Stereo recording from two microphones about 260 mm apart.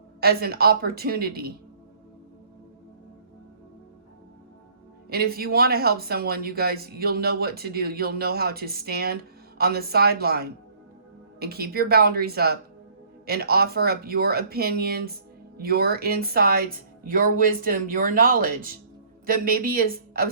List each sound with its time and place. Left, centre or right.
0.2 s speech: right
5.0 s speech: right